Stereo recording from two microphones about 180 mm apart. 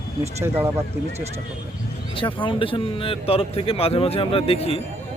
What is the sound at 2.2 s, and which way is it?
Speech, 30° left (ahead or behind).